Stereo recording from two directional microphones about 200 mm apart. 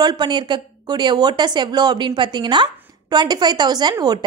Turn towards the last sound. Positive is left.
turn(degrees=-20)  # may be behind; listen again after turning